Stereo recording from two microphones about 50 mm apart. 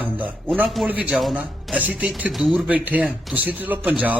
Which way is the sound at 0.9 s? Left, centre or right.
Right.